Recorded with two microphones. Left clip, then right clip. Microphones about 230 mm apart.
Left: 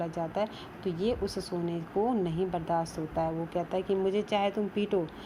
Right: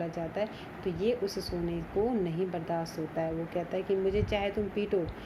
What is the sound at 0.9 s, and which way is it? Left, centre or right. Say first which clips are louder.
Speech: right 1 dB; left.